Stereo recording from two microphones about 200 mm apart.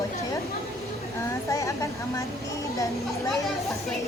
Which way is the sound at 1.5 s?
15° left (ahead or behind).